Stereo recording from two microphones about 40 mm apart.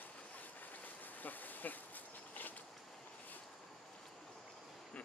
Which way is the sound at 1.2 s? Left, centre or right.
Left.